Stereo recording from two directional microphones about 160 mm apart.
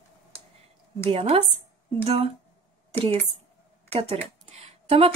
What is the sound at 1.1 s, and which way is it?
Speech, 35° right (ahead or behind).